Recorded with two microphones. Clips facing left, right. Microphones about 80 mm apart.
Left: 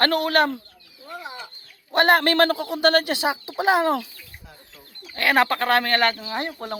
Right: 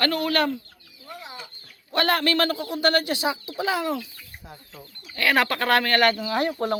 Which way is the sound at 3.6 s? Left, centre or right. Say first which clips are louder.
Left 7 dB; left.